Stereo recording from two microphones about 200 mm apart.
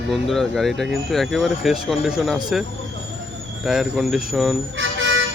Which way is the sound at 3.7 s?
Centre (ahead or behind).